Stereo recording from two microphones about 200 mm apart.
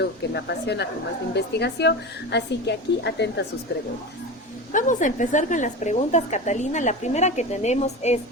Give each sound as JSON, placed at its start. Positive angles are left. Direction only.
{"t": 0.0, "sound": "a woman's voice", "side_deg": 60}
{"t": 4.7, "sound": "a woman's voice", "side_deg": 40}